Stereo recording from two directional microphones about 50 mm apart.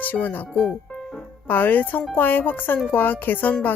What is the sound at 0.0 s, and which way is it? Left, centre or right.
Speech, left.